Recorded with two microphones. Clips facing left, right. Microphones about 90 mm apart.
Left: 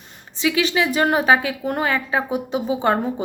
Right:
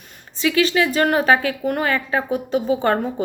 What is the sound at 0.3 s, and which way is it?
A woman's voice, 20° left (ahead or behind).